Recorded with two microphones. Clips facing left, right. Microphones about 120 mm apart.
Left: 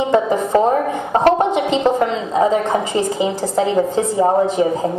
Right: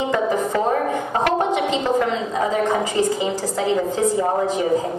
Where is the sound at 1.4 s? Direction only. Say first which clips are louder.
Left 3 dB; 20° left (ahead or behind).